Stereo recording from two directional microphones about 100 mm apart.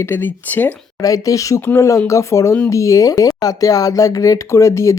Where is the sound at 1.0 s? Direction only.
35° left (ahead or behind).